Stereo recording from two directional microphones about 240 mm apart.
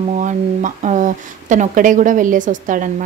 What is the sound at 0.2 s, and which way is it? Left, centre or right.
Speech, right.